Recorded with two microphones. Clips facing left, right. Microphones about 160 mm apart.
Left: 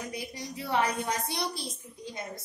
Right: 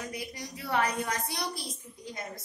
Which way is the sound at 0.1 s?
25° left (ahead or behind).